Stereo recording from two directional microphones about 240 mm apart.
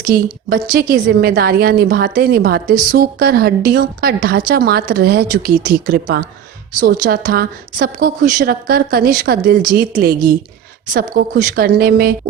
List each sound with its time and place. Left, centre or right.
0.0 s a woman's voice: right